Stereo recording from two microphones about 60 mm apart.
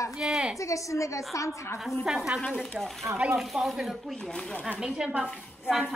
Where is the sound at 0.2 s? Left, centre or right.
Centre.